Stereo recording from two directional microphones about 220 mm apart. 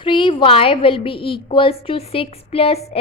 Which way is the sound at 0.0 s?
20° left (ahead or behind).